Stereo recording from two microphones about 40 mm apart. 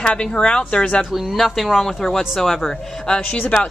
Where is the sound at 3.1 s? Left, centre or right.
Left.